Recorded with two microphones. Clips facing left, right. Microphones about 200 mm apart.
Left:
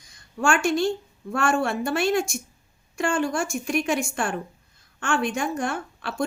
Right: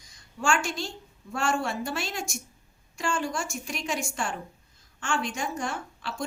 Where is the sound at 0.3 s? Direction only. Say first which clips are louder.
Left 6 dB; 55° left (ahead or behind).